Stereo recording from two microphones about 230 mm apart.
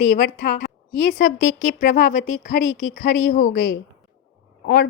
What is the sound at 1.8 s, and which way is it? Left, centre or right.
A woman's voice, left.